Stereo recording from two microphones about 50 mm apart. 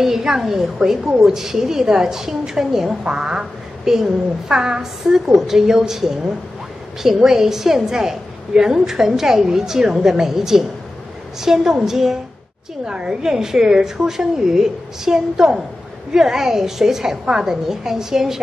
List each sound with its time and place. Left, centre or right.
0.0 s a woman's voice: centre